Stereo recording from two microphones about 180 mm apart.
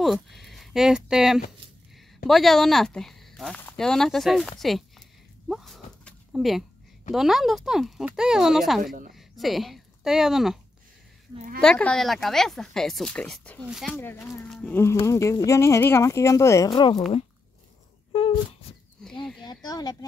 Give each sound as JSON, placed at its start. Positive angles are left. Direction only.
{"t": 0.0, "sound": "speech", "side_deg": 0}
{"t": 5.5, "sound": "a sound", "side_deg": 0}
{"t": 7.1, "sound": "speech", "side_deg": 0}
{"t": 11.6, "sound": "speech", "side_deg": 5}
{"t": 13.9, "sound": "speech", "side_deg": 10}
{"t": 18.1, "sound": "speech", "side_deg": 35}
{"t": 19.4, "sound": "speech", "side_deg": 20}